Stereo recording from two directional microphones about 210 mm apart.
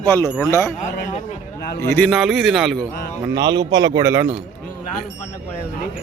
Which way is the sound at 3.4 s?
20° right (ahead or behind).